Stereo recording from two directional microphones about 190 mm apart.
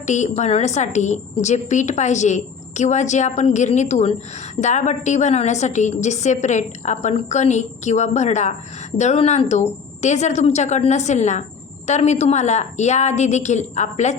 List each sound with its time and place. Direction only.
0.0 s a woman's voice: 40° left (ahead or behind)